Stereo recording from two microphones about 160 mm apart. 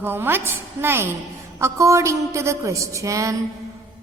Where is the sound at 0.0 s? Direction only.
15° right (ahead or behind).